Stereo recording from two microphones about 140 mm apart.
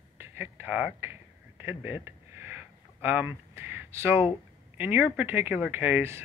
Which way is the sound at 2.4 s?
15° right (ahead or behind).